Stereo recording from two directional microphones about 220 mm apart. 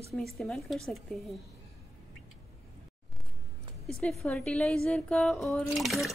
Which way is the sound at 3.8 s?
5° left (ahead or behind).